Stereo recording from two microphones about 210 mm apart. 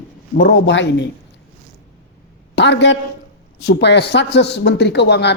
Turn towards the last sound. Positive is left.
turn(degrees=55)  # may be behind; listen again after turning